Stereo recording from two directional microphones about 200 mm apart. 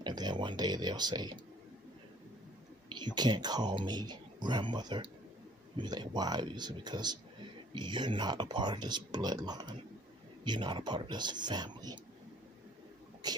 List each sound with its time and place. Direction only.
0.0 s speech: 20° right (ahead or behind)
2.9 s speech: 20° right (ahead or behind)
13.2 s speech: 20° right (ahead or behind)